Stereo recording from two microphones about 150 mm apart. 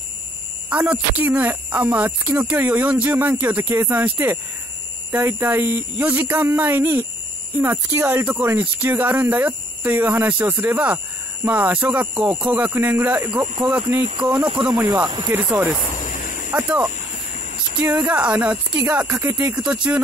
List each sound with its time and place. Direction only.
0.7 s speech: 10° right (ahead or behind)
14.7 s speech: 25° right (ahead or behind)
15.3 s speech: 10° right (ahead or behind)
16.0 s a sound: 60° left (ahead or behind)
16.5 s speech: 10° right (ahead or behind)